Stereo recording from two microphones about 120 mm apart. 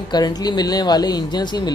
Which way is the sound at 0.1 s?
35° left (ahead or behind).